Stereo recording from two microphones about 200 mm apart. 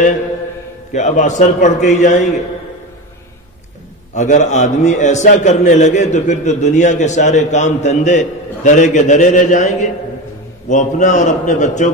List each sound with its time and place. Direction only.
0.9 s a man's voice: 35° left (ahead or behind)
4.1 s a man's voice: 35° left (ahead or behind)